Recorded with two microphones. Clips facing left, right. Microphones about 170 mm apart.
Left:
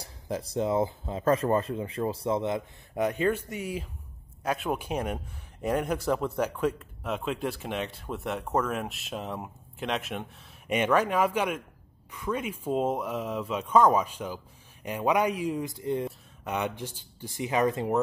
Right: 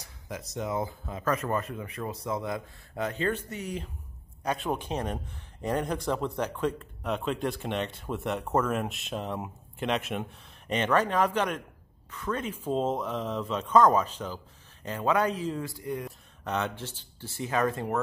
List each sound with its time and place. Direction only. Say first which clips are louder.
0.0 s a man's voice: left 6 dB; 30° left (ahead or behind)
16.4 s speech: even; 15° left (ahead or behind)